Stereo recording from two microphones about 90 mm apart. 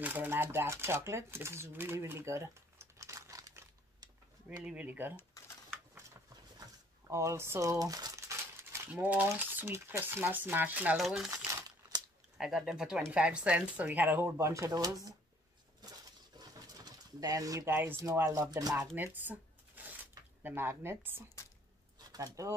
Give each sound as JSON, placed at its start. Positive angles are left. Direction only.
{"t": 0.0, "sound": "speech", "side_deg": -20}
{"t": 4.6, "sound": "speech", "side_deg": -15}
{"t": 7.1, "sound": "speech", "side_deg": -30}
{"t": 11.4, "sound": "crumpling", "side_deg": -35}
{"t": 12.4, "sound": "speech", "side_deg": -5}
{"t": 14.2, "sound": "speech", "side_deg": -35}
{"t": 16.3, "sound": "pigeon", "side_deg": -45}
{"t": 17.6, "sound": "speech", "side_deg": -25}
{"t": 19.0, "sound": "a sound", "side_deg": -20}
{"t": 20.4, "sound": "speech", "side_deg": -25}
{"t": 22.1, "sound": "speech", "side_deg": -40}